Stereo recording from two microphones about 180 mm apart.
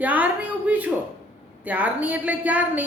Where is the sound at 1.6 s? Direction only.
10° right (ahead or behind).